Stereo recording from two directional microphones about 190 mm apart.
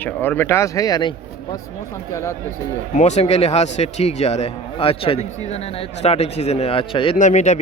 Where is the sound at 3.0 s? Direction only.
35° left (ahead or behind).